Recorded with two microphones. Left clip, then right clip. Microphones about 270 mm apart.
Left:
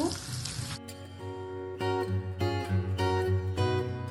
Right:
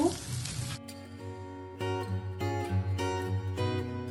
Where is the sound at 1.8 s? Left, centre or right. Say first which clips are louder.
Left 4 dB; centre.